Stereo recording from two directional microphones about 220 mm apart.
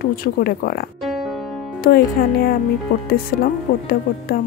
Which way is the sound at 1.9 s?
45° left (ahead or behind).